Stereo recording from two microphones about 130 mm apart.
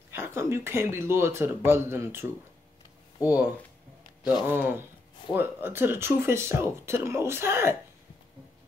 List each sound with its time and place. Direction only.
0.1 s speech: 20° right (ahead or behind)
3.3 s speech: 15° right (ahead or behind)